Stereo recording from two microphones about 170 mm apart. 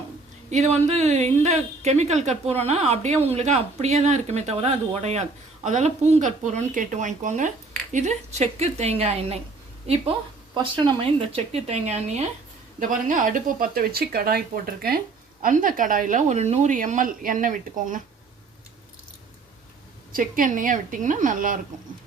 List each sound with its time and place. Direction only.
0.5 s speech: 40° right (ahead or behind)
10.6 s speech: 30° right (ahead or behind); by 18.0 s 50° right (ahead or behind)
20.1 s speech: 55° right (ahead or behind)